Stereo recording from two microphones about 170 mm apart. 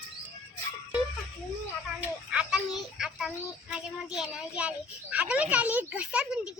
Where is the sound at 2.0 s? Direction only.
5° right (ahead or behind).